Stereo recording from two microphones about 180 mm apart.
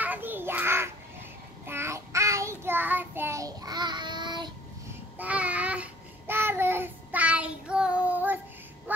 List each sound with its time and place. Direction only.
0.0 s child singing: 10° right (ahead or behind)
5.2 s child singing: 5° right (ahead or behind)